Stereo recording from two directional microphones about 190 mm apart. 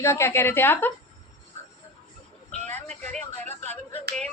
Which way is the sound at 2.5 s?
5° left (ahead or behind).